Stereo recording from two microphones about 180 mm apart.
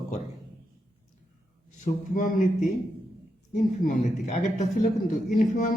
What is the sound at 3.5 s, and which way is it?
A man's voice, 45° left (ahead or behind).